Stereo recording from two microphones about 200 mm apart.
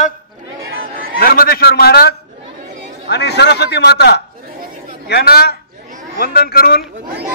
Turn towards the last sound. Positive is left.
turn(degrees=50)  # may be behind; listen again after turning